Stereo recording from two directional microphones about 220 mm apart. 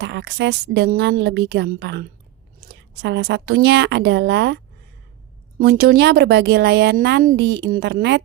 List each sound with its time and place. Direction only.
0.0 s a woman's voice: 50° right (ahead or behind)